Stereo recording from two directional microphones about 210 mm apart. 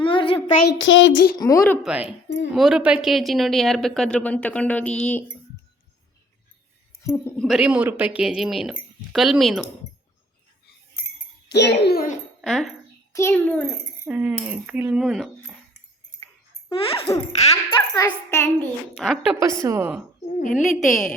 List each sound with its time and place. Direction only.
0.0 s a sound: 25° left (ahead or behind)
0.6 s a sound: 60° left (ahead or behind)
1.4 s a child's voice: 15° left (ahead or behind)
1.8 s a woman's voice: 5° right (ahead or behind)
7.0 s a woman's voice: 10° left (ahead or behind)
7.4 s a woman's voice: 5° right (ahead or behind)
11.5 s a child's voice: 55° left (ahead or behind)
12.4 s a child's voice: centre (ahead or behind)
14.0 s speech: 5° right (ahead or behind)
17.3 s a child's voice: 30° left (ahead or behind); by 18.7 s 15° left (ahead or behind)
18.9 s a woman's voice: centre (ahead or behind)
19.4 s speech: 15° right (ahead or behind)
20.2 s a woman's voice: 40° left (ahead or behind)
20.6 s a woman's voice: centre (ahead or behind)